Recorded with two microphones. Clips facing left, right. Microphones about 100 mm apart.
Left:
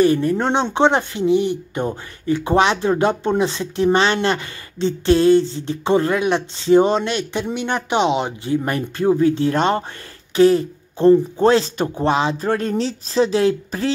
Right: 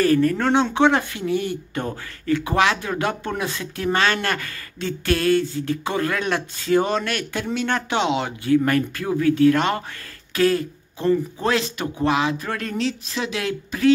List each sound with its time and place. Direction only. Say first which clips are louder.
0.0 s speech: left 2 dB; 20° left (ahead or behind)